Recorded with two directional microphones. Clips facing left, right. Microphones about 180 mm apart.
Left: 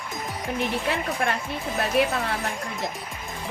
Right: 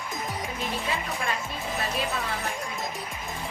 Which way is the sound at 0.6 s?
65° left (ahead or behind).